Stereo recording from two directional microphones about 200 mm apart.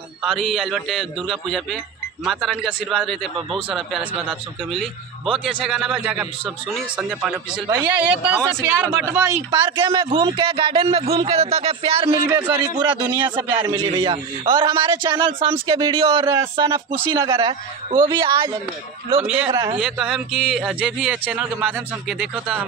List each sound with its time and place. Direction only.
0.2 s speech: centre (ahead or behind); by 12.1 s 30° right (ahead or behind)
12.3 s speech: 10° right (ahead or behind)
12.7 s speech: 20° right (ahead or behind)
19.8 s speech: 5° right (ahead or behind)